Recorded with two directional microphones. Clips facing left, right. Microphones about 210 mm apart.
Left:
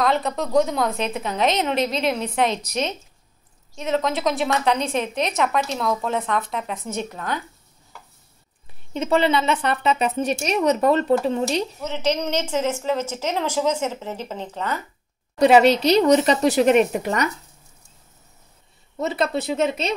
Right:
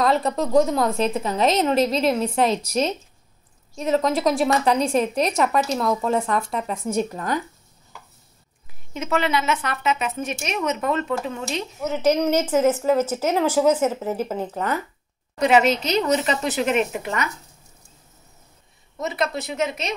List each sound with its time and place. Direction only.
0.0 s a woman's voice: centre (ahead or behind)
3.7 s a woman's voice: centre (ahead or behind)
8.9 s a woman's voice: 30° left (ahead or behind)
11.8 s speech: 10° right (ahead or behind)
15.3 s a woman's voice: 35° left (ahead or behind)
18.9 s a woman's voice: 30° left (ahead or behind)